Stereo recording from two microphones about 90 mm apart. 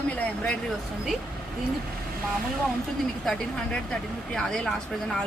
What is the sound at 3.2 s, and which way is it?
A woman's voice, 10° left (ahead or behind).